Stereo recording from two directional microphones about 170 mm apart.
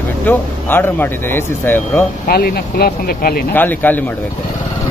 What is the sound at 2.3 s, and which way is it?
Speech, 65° left (ahead or behind).